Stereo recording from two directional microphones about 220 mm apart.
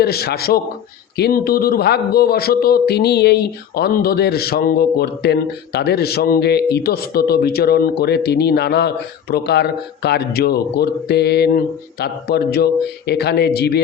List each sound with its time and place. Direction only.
0.0 s speech: 45° left (ahead or behind)